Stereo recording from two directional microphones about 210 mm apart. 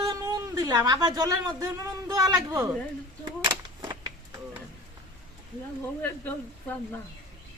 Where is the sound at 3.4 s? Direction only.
20° right (ahead or behind).